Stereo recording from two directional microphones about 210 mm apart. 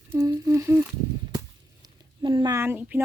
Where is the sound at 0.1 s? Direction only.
15° right (ahead or behind).